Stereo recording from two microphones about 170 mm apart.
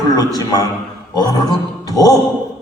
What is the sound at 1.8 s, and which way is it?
Speech, 20° left (ahead or behind).